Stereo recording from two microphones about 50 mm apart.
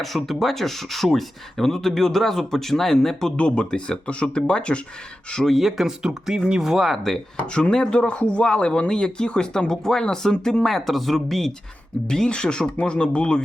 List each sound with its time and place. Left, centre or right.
0.0 s speech: centre
3.3 s speech: left
5.5 s speech: centre
7.5 s speech: centre
10.7 s speech: centre
12.0 s speech: centre